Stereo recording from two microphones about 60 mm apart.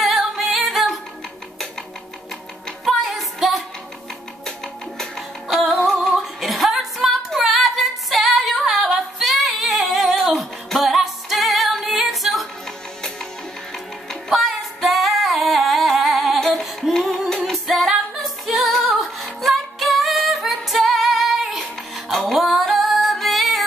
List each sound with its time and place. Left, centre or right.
0.4 s music: centre
2.8 s music: centre
7.3 s female singing: centre
14.3 s female singing: centre
19.4 s music: centre